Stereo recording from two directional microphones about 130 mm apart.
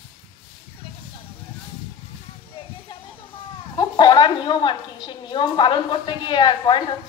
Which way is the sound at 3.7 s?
35° left (ahead or behind).